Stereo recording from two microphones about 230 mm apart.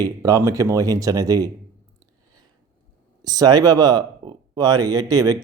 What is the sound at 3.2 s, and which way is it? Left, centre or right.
Speech, centre.